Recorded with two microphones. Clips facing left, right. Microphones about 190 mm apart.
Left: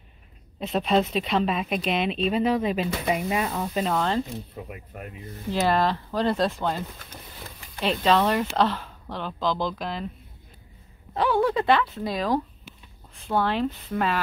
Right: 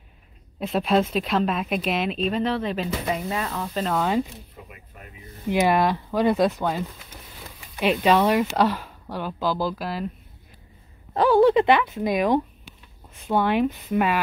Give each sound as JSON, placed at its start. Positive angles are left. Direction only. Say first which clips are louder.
{"t": 0.6, "sound": "a woman's voice", "louder": "right 1 dB", "side_deg": -5}
{"t": 3.9, "sound": "speech", "louder": "right 4 dB", "side_deg": -5}
{"t": 5.5, "sound": "speech", "louder": "right 3 dB", "side_deg": -15}
{"t": 7.8, "sound": "speech", "louder": "right 2 dB", "side_deg": -10}
{"t": 11.1, "sound": "speech", "louder": "right 5 dB", "side_deg": -40}
{"t": 11.4, "sound": "speech", "louder": "right 5 dB", "side_deg": -20}